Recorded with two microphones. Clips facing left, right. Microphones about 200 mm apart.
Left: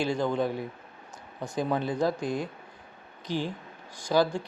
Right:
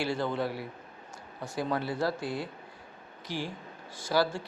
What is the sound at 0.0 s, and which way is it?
Speech, 15° left (ahead or behind).